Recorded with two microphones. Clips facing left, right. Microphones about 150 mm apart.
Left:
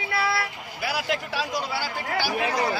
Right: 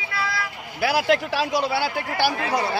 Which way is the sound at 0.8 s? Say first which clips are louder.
Right 8 dB; 85° right.